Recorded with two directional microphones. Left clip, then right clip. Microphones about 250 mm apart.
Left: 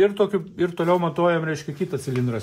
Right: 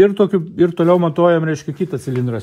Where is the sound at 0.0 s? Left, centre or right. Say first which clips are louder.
Right 6 dB; right.